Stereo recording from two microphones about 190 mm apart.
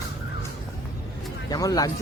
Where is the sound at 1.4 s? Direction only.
20° left (ahead or behind).